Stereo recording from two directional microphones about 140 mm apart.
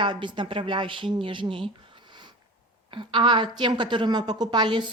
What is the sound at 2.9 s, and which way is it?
A woman's voice, 35° right (ahead or behind).